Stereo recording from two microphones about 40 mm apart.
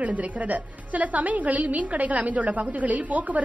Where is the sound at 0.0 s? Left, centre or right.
Right.